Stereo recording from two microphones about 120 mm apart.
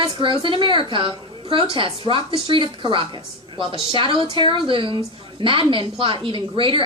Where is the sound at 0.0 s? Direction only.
45° right (ahead or behind).